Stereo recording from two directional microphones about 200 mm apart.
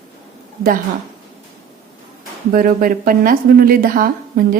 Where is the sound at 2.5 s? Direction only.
45° right (ahead or behind).